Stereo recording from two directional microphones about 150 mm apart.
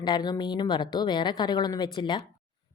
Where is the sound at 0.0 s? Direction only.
30° left (ahead or behind).